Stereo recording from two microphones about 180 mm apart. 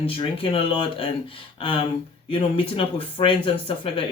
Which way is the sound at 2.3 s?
30° left (ahead or behind).